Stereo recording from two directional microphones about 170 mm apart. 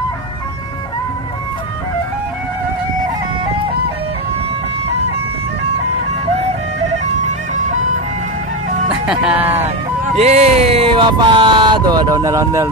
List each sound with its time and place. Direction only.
9.0 s speech: 5° right (ahead or behind)
10.1 s speech: 40° right (ahead or behind); by 12.6 s 20° right (ahead or behind)